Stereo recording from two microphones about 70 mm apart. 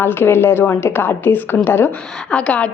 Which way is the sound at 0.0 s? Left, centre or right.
Left.